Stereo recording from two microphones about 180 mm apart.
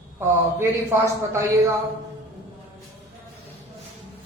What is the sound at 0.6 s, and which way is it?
Speech, 15° right (ahead or behind).